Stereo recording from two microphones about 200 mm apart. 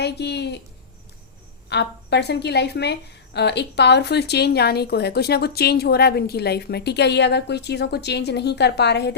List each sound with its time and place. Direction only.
0.0 s a woman's voice: 55° left (ahead or behind)
1.7 s a woman's voice: 55° left (ahead or behind)